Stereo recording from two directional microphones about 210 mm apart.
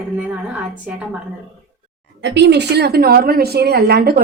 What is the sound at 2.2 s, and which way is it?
A woman's voice, 55° right (ahead or behind).